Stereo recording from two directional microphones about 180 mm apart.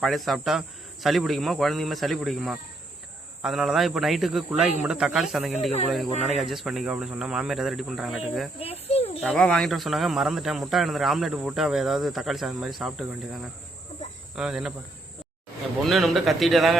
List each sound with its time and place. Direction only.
0.0 s speech: centre (ahead or behind)
8.5 s insect: 35° left (ahead or behind)
9.2 s speech: 5° left (ahead or behind)
15.8 s speech: centre (ahead or behind)